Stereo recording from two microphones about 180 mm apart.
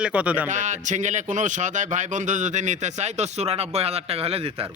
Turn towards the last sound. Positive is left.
turn(degrees=-35)  # may be behind; listen again after turning